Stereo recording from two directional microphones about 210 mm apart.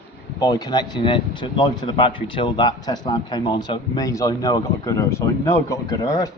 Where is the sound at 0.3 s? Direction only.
15° left (ahead or behind).